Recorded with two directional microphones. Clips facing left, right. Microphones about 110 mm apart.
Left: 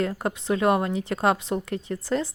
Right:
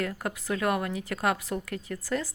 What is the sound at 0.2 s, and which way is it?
Speech, 25° left (ahead or behind).